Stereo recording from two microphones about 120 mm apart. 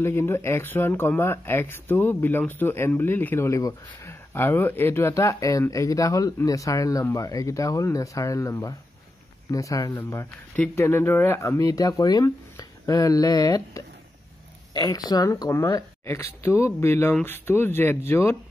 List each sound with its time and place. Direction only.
0.0 s speech: 20° left (ahead or behind)